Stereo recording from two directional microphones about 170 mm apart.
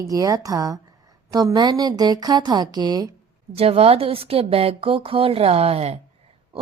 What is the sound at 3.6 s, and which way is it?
Speech, 35° right (ahead or behind).